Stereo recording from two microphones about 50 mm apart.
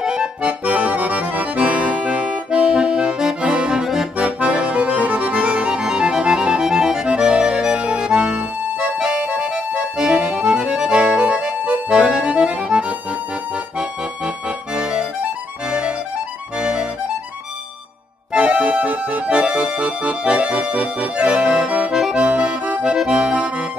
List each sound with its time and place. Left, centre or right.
0.0 s accordion: centre
2.5 s accordion: centre
4.2 s accordion: right
11.6 s accordion: right
12.0 s accordion: centre
14.8 s accordion: centre
16.5 s music: centre
18.3 s music: right
19.6 s accordion: right